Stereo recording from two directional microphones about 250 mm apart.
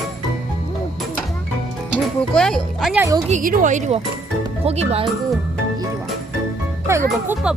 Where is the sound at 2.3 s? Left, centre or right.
Centre.